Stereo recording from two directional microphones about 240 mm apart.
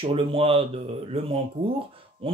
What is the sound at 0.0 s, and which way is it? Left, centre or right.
Speech, right.